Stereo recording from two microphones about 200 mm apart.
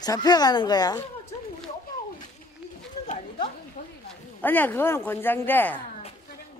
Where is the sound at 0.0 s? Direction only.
20° left (ahead or behind).